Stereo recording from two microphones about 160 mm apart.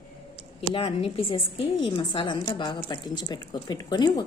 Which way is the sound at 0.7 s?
40° left (ahead or behind).